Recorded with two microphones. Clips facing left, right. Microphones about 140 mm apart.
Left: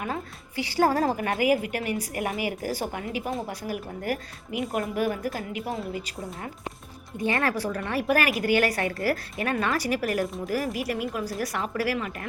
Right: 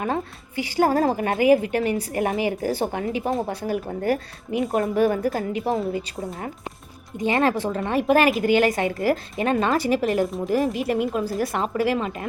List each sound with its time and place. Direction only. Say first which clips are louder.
0.5 s speech: right 3 dB; 20° right (ahead or behind)